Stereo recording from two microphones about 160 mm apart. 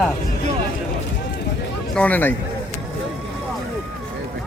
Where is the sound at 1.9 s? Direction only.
10° left (ahead or behind).